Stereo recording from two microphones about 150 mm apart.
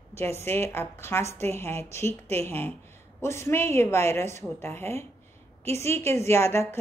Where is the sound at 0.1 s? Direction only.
15° left (ahead or behind).